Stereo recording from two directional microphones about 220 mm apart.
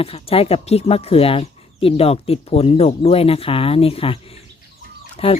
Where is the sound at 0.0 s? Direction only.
25° left (ahead or behind).